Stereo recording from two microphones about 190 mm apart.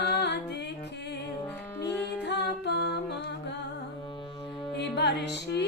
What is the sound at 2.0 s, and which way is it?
Music, 65° left (ahead or behind).